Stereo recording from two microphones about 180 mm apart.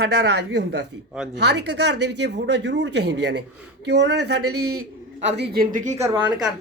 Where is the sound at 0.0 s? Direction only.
65° right (ahead or behind).